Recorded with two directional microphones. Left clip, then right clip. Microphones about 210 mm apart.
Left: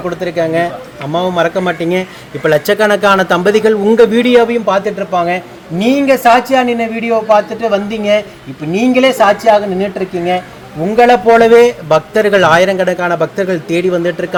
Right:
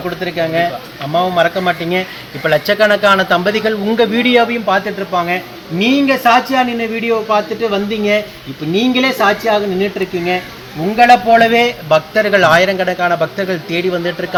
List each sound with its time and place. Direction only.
0.3 s a man's voice: 55° left (ahead or behind); by 10.4 s 40° left (ahead or behind)
10.9 s speech: 55° left (ahead or behind)